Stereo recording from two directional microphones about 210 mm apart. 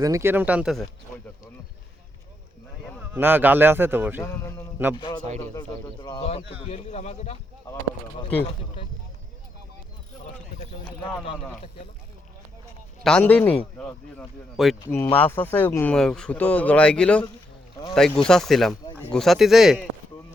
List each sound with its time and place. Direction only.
0.0 s speech: 15° right (ahead or behind)
3.0 s speech: 10° right (ahead or behind)
4.2 s a man's voice: 10° left (ahead or behind); by 7.3 s 30° left (ahead or behind)
13.0 s speech: 5° left (ahead or behind)